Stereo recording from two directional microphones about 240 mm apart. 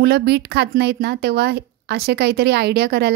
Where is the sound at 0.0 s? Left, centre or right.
Right.